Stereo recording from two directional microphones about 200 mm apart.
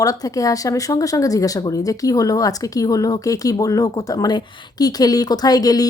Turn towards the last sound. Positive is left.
turn(degrees=20)  # may be behind; listen again after turning